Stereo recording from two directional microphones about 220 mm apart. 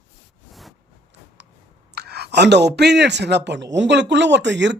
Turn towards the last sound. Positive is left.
turn(degrees=-55)  # may be behind; listen again after turning